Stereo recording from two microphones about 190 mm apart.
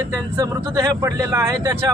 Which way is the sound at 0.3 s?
20° right (ahead or behind).